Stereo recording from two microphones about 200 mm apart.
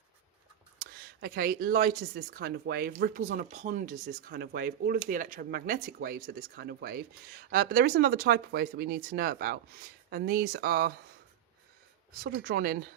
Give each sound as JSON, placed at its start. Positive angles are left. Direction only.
{"t": 0.8, "sound": "speech", "side_deg": -50}
{"t": 12.2, "sound": "speech", "side_deg": -50}